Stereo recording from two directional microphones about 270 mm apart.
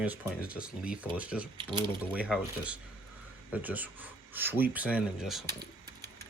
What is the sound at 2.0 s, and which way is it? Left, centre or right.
Speech, centre.